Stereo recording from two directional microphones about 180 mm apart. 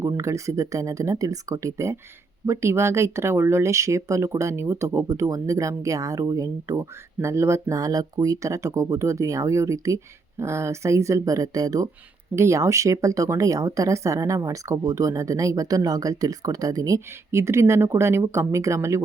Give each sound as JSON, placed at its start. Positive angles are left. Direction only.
{"t": 0.0, "sound": "speech", "side_deg": -15}